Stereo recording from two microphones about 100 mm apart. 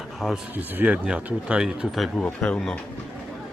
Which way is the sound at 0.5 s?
15° right (ahead or behind).